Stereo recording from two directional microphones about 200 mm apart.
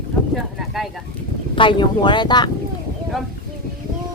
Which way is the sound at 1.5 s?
25° left (ahead or behind).